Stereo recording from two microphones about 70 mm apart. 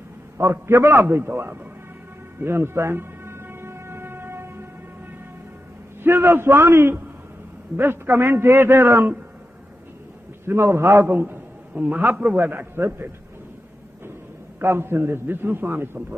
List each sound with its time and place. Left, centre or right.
0.4 s a man's voice: right
2.4 s music: right
6.0 s a man's voice: right
10.4 s a man's voice: right
12.7 s a man's voice: right
14.6 s a man's voice: right